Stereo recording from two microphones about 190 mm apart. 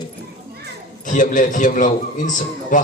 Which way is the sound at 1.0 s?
40° left (ahead or behind).